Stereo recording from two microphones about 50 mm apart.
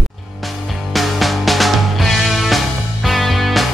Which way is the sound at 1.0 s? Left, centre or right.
Centre.